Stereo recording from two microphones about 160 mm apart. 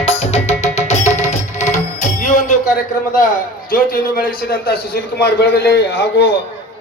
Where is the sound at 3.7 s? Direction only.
65° left (ahead or behind); by 6.3 s 90° left.